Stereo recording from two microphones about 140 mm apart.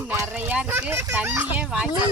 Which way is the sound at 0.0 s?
15° right (ahead or behind).